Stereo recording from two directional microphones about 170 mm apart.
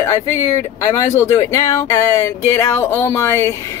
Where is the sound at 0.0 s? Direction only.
15° left (ahead or behind).